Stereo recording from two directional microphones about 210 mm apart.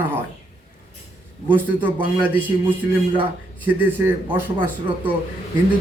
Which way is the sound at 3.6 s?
10° right (ahead or behind).